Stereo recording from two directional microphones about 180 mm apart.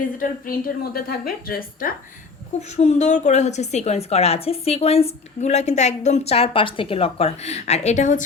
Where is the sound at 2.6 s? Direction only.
40° left (ahead or behind).